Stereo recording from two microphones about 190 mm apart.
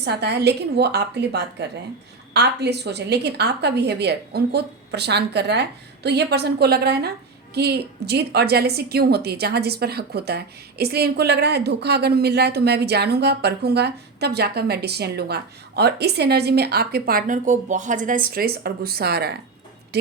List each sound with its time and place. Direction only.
0.0 s a woman's voice: 60° right (ahead or behind)